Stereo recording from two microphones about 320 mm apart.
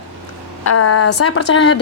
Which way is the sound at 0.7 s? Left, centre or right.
Left.